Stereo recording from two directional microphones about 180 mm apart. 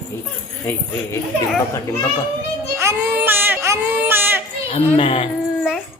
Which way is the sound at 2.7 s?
15° right (ahead or behind).